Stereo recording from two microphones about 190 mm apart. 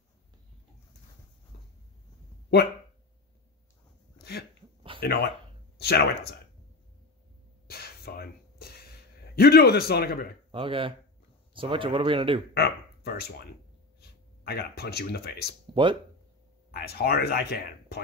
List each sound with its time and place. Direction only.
4.2 s a sound: 60° left (ahead or behind)
5.0 s speech: 55° left (ahead or behind)
7.6 s a sound: 55° left (ahead or behind)
9.3 s speech: 55° left (ahead or behind)
10.5 s speech: 30° right (ahead or behind)
12.5 s speech: 55° left (ahead or behind)
15.7 s speech: 25° right (ahead or behind)
16.7 s speech: 55° left (ahead or behind)